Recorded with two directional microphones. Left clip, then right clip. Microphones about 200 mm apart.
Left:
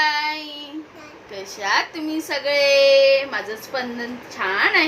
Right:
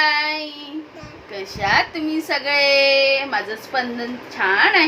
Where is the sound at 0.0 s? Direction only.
15° right (ahead or behind).